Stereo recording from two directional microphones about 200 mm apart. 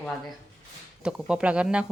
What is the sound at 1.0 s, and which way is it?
Speech, 5° right (ahead or behind).